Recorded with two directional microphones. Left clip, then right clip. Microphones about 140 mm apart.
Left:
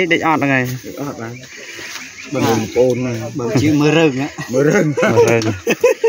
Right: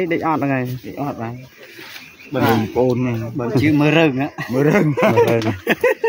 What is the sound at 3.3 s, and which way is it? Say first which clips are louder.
Speech: left 1 dB; centre (ahead or behind).